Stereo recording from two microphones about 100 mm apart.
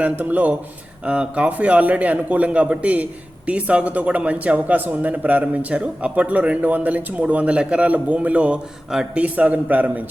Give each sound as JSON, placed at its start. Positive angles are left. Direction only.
{"t": 0.0, "sound": "a man's voice", "side_deg": -15}